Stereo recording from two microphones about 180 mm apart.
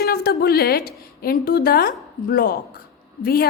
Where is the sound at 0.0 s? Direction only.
60° left (ahead or behind).